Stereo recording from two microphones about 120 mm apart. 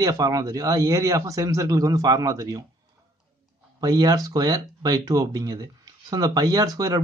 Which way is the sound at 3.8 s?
35° right (ahead or behind).